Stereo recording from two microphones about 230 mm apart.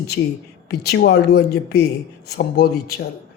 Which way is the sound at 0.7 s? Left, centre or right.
Left.